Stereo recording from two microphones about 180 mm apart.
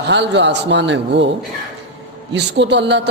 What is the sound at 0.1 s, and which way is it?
A man's voice, 80° right.